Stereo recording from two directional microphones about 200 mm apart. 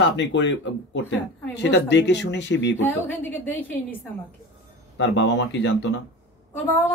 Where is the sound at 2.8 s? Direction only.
10° left (ahead or behind).